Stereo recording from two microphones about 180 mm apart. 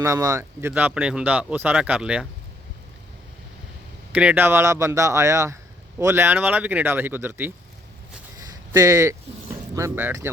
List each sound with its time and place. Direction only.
0.0 s speech: 15° right (ahead or behind)
4.1 s speech: 10° right (ahead or behind)
8.7 s speech: 20° right (ahead or behind)